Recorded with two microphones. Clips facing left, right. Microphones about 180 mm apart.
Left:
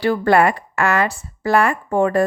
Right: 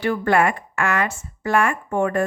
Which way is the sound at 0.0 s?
35° left (ahead or behind).